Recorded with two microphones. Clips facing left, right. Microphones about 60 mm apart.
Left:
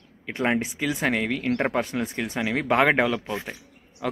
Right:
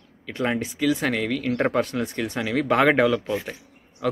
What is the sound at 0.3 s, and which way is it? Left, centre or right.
Speech, left.